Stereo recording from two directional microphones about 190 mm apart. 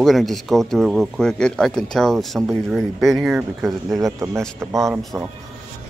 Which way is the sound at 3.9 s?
15° right (ahead or behind).